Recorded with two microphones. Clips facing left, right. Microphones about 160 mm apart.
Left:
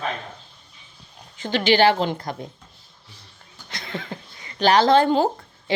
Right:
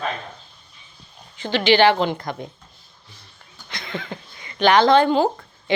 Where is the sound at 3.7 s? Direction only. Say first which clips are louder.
Right 1 dB; 35° left (ahead or behind).